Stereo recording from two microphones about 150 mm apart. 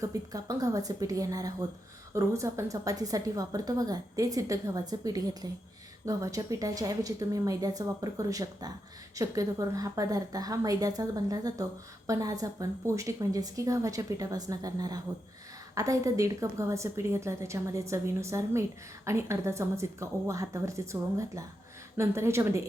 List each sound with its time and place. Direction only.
0.0 s a woman's voice: 20° right (ahead or behind)